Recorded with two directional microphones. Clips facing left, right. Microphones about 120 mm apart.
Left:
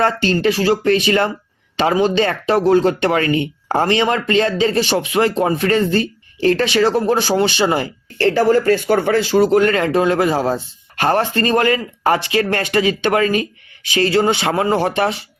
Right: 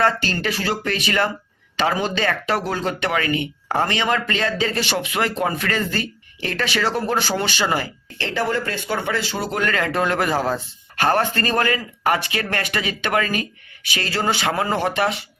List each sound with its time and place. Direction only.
0.0 s speech: 30° left (ahead or behind)
8.2 s speech: 40° left (ahead or behind); by 14.8 s 25° left (ahead or behind)
14.8 s speech: 35° left (ahead or behind)